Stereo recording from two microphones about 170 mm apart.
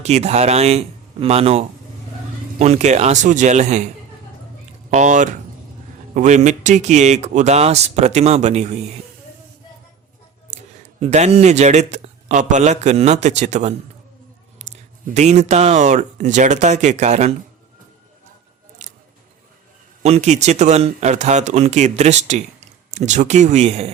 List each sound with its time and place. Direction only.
0.0 s a man's voice: 40° right (ahead or behind)
4.9 s a man's voice: 45° right (ahead or behind)
11.0 s speech: 40° right (ahead or behind)
18.8 s scissors: 45° right (ahead or behind)
20.0 s speech: 40° right (ahead or behind)